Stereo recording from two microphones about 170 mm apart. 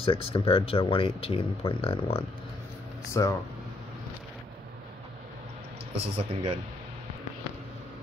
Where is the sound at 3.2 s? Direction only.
20° left (ahead or behind).